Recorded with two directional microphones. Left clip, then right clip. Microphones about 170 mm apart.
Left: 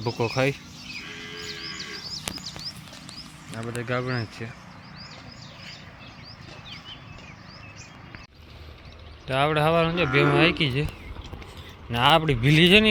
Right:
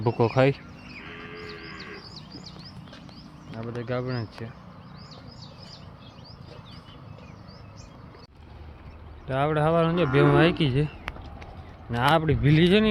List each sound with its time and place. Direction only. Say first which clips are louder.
0.0 s speech: right 3 dB; 25° right (ahead or behind)
1.5 s music: left 4 dB; 65° right (ahead or behind)
3.8 s speech: left 3 dB; 5° left (ahead or behind)
9.2 s speech: left 2 dB; 5° right (ahead or behind); by 10.8 s 25° right (ahead or behind)
11.9 s a man's voice: left 3 dB; 5° right (ahead or behind)